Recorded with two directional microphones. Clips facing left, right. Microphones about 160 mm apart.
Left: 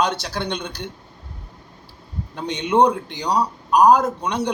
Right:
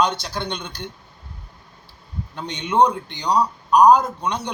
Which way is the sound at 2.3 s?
5° left (ahead or behind).